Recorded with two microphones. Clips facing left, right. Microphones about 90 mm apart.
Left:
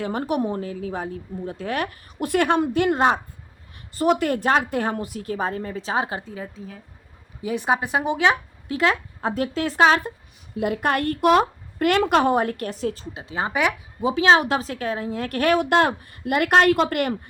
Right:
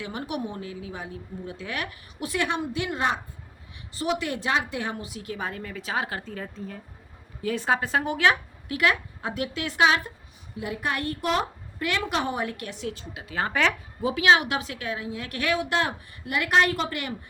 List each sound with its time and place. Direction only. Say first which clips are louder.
0.0 s a woman's voice: left 8 dB; 40° left (ahead or behind); by 6.3 s 20° left (ahead or behind)
6.3 s a woman's voice: left 1 dB; 5° left (ahead or behind)
7.4 s a woman's voice: left 3 dB; 15° left (ahead or behind); by 10.0 s 40° left (ahead or behind)
10.5 s a woman's voice: left 7 dB; 60° left (ahead or behind); by 13.7 s 15° left (ahead or behind)
14.0 s a woman's voice: left 3 dB; 30° left (ahead or behind); by 17.2 s 55° left (ahead or behind)